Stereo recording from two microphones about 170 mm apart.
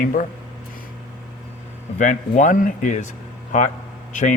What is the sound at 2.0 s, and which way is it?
Speech, 45° left (ahead or behind).